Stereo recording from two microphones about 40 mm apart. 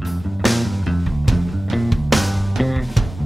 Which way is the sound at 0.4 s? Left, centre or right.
Centre.